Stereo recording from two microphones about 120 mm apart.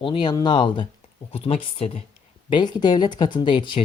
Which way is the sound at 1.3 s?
55° left (ahead or behind).